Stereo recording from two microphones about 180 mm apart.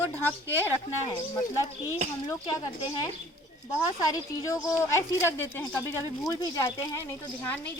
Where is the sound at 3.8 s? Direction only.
20° left (ahead or behind).